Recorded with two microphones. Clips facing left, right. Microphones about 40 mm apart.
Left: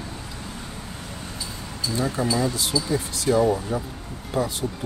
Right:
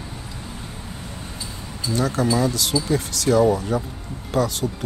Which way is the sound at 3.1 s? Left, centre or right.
Right.